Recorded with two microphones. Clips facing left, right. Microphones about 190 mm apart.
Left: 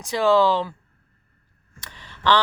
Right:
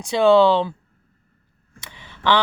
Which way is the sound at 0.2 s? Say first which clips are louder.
Right 4 dB; 20° right (ahead or behind).